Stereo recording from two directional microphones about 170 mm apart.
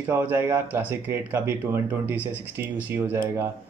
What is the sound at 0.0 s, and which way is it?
Speech, 10° right (ahead or behind).